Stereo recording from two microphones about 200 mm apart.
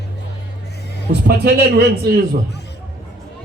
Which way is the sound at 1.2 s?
50° right (ahead or behind).